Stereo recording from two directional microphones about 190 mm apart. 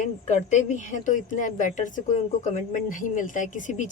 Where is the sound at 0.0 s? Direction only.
40° left (ahead or behind).